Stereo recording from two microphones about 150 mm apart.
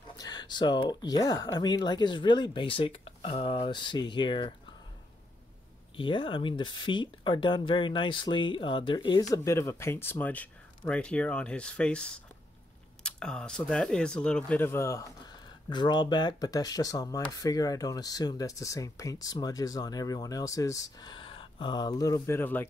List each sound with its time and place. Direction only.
0.2 s speech: 30° left (ahead or behind)
5.9 s speech: 35° left (ahead or behind)
9.3 s speech: 20° left (ahead or behind)